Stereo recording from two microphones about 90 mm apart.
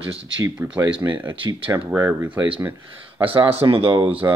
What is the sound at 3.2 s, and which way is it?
Speech, 85° right.